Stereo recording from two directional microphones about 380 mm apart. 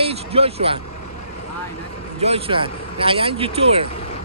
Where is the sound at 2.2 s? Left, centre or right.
Centre.